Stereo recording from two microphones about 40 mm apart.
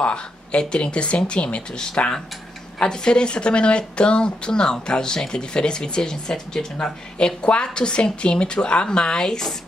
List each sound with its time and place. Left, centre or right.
0.0 s a woman's voice: left